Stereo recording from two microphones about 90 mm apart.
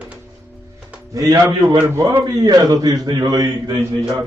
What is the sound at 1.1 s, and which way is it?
A man's voice, 40° right (ahead or behind).